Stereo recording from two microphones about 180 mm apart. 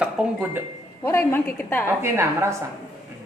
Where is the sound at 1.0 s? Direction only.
15° left (ahead or behind).